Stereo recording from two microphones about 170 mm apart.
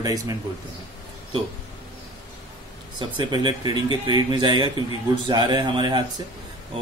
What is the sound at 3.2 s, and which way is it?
A man's voice, 25° right (ahead or behind).